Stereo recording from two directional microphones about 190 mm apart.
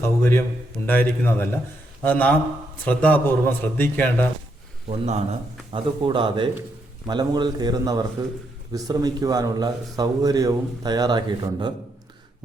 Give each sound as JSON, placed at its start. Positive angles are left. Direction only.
{"t": 0.0, "sound": "speech", "side_deg": 10}
{"t": 4.9, "sound": "a man's voice", "side_deg": -35}